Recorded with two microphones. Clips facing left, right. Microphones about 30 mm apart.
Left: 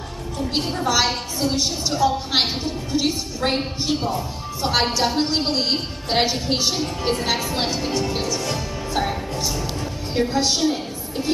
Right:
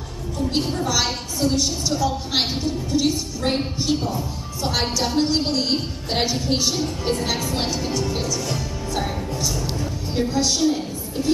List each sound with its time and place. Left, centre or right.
0.5 s a woman's voice: centre